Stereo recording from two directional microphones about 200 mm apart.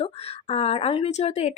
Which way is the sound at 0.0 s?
30° left (ahead or behind).